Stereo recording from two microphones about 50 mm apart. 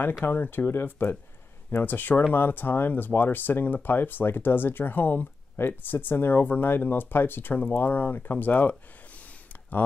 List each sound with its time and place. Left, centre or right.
0.2 s speech: left